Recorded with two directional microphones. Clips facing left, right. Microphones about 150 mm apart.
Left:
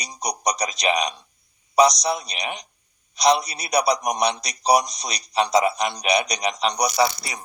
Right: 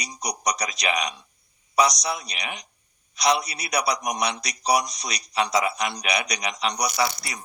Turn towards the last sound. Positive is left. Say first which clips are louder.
# left 4 dB
turn(degrees=25)  # may be behind; listen again after turning